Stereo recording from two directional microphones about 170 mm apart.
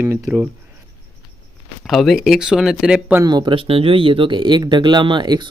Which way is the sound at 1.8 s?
Centre (ahead or behind).